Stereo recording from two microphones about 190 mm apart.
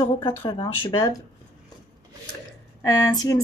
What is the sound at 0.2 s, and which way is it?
Speech, 25° left (ahead or behind).